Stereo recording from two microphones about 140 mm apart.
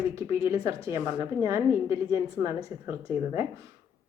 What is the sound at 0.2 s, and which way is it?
A woman's voice, 20° right (ahead or behind).